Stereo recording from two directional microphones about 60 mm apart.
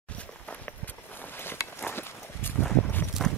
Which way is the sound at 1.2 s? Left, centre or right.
Left.